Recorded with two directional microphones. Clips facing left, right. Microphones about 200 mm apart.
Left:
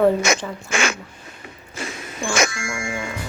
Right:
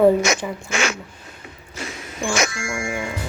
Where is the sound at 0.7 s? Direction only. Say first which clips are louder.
Left 1 dB; 55° left (ahead or behind).